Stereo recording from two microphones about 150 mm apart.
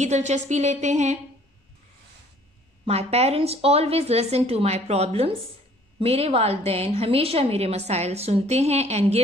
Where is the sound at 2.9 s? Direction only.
45° right (ahead or behind).